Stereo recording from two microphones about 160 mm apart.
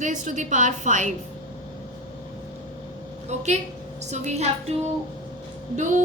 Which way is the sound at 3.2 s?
45° right (ahead or behind).